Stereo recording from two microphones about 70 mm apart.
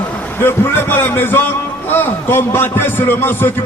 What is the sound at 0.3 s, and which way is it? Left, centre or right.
A man's voice, left.